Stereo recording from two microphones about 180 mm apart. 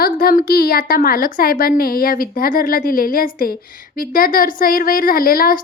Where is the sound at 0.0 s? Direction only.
55° left (ahead or behind).